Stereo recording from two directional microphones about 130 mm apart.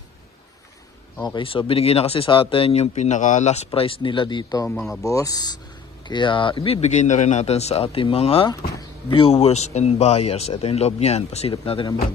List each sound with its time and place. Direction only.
1.2 s speech: 40° left (ahead or behind)
4.6 s speech: 5° left (ahead or behind)
5.0 s speech: 25° left (ahead or behind); by 11.9 s 45° left (ahead or behind)